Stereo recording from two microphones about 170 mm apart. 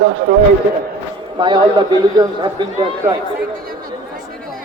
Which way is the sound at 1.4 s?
30° right (ahead or behind).